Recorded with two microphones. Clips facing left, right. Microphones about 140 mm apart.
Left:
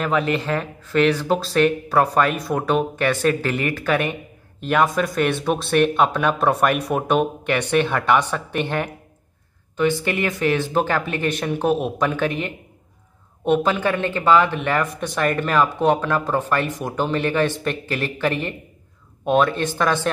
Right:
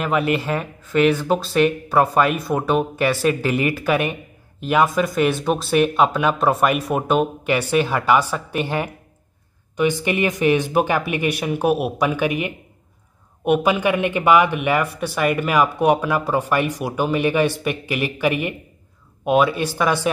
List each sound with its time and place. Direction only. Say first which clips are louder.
0.0 s speech: right 1 dB; 5° right (ahead or behind)